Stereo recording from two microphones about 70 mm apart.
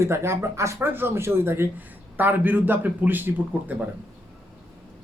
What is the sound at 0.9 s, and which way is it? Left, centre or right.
A man's voice, right.